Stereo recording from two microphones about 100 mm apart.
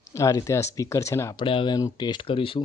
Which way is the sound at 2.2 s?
65° left (ahead or behind).